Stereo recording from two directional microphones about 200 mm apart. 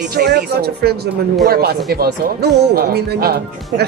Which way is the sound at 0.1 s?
55° right (ahead or behind).